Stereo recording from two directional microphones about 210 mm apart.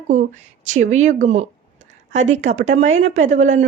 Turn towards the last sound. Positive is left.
turn(degrees=-35)  # may be behind; listen again after turning